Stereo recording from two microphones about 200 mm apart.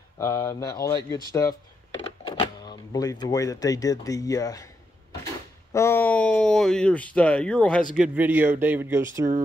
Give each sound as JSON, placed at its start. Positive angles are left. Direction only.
{"t": 0.2, "sound": "speech", "side_deg": 15}
{"t": 5.7, "sound": "a sound", "side_deg": 15}
{"t": 7.9, "sound": "speech", "side_deg": -5}